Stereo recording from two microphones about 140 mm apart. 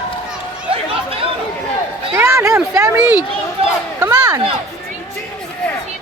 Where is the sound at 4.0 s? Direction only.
25° right (ahead or behind).